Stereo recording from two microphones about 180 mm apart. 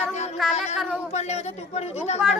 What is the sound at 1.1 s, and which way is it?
Speech, 40° left (ahead or behind).